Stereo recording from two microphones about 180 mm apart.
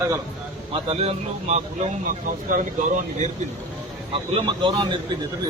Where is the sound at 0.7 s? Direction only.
35° right (ahead or behind).